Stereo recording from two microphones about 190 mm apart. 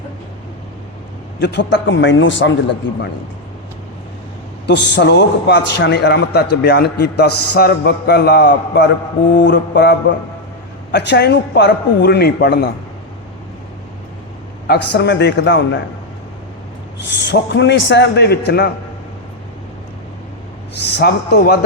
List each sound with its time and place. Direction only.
1.4 s a man's voice: 60° left (ahead or behind)
4.6 s a man's voice: 65° left (ahead or behind)
10.9 s a man's voice: 65° left (ahead or behind)
14.7 s a man's voice: 65° left (ahead or behind)
17.2 s a man's voice: 70° left (ahead or behind)
20.7 s a man's voice: 60° left (ahead or behind)